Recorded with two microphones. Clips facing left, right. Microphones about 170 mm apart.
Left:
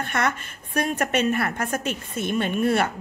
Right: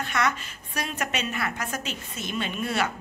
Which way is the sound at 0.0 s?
55° left (ahead or behind).